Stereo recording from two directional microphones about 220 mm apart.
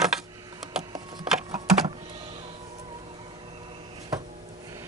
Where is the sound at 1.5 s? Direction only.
20° right (ahead or behind).